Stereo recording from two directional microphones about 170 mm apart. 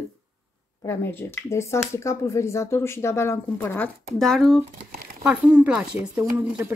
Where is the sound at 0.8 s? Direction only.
15° left (ahead or behind).